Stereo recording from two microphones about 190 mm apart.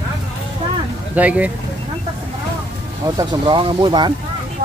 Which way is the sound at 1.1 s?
10° right (ahead or behind).